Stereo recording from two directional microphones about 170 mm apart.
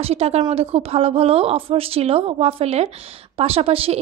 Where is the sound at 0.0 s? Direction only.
35° right (ahead or behind).